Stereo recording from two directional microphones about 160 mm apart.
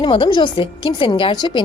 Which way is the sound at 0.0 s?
30° left (ahead or behind).